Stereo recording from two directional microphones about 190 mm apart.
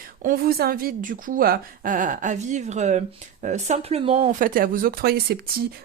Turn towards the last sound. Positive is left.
turn(degrees=-55)  # may be behind; listen again after turning